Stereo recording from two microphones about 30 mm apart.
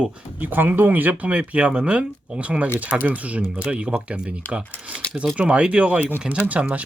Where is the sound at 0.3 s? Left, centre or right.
Right.